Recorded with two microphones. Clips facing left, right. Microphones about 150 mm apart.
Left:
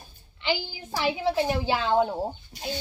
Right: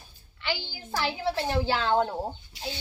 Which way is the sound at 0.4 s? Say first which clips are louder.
Left 4 dB; 15° left (ahead or behind).